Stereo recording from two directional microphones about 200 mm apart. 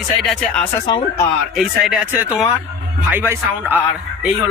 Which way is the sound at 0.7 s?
20° left (ahead or behind).